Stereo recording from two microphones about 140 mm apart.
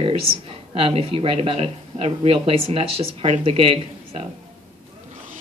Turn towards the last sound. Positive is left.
turn(degrees=-45)  # may be behind; listen again after turning